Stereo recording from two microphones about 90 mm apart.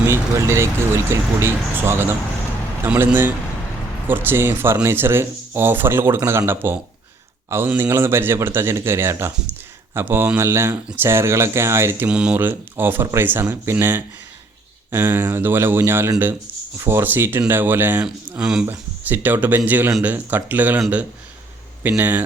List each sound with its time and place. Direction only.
0.0 s speech: 30° right (ahead or behind)
12.0 s a man's voice: 15° right (ahead or behind)
18.0 s a man's voice: 10° right (ahead or behind)
18.6 s speech: 25° right (ahead or behind)
21.8 s speech: 20° right (ahead or behind)